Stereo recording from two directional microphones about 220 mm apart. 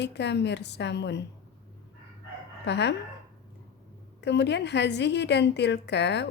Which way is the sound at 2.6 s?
50° left (ahead or behind).